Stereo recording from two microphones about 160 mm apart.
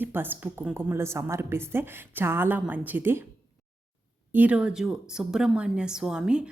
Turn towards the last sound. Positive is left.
turn(degrees=-5)  # may be behind; listen again after turning